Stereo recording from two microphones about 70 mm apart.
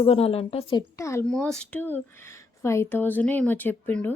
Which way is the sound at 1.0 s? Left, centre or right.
Left.